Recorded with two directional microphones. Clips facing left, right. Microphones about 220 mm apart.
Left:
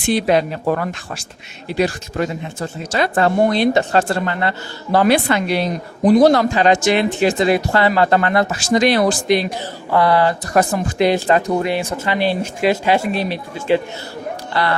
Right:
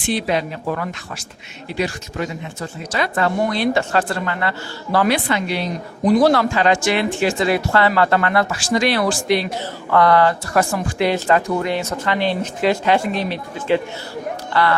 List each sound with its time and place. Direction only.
0.1 s speech: 45° left (ahead or behind)
2.9 s speech: 30° left (ahead or behind)
5.1 s speech: 40° left (ahead or behind)
6.1 s speech: 20° left (ahead or behind)
14.5 s speech: 30° left (ahead or behind)